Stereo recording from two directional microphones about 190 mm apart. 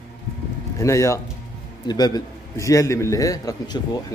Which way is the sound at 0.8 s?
15° left (ahead or behind).